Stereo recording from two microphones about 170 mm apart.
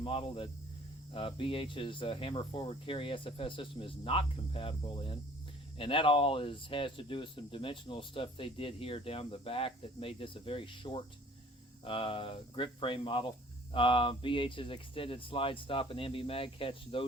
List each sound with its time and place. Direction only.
0.0 s speech: 30° left (ahead or behind)